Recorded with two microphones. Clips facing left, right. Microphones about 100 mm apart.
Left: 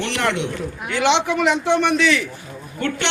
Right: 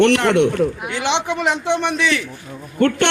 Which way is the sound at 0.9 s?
20° right (ahead or behind).